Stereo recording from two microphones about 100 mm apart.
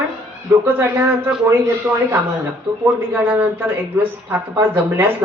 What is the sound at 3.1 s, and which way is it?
Speech, 20° right (ahead or behind).